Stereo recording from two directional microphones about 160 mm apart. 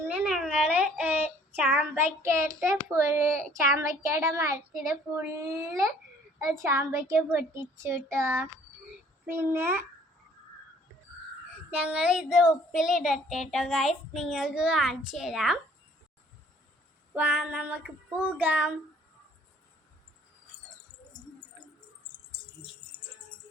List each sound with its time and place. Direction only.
0.1 s a sound: 5° right (ahead or behind)
0.7 s child singing: 10° right (ahead or behind)
2.9 s a child's voice: 15° right (ahead or behind)
11.7 s speech: 10° right (ahead or behind)
17.2 s a child's voice: 10° right (ahead or behind)